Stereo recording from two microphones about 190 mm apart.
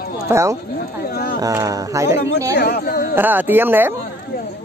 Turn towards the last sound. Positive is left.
turn(degrees=-10)  # may be behind; listen again after turning